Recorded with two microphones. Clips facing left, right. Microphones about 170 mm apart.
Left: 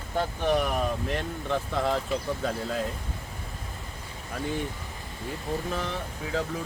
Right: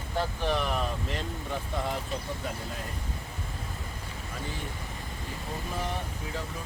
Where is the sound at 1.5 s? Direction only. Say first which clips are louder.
Left 7 dB; 90° left.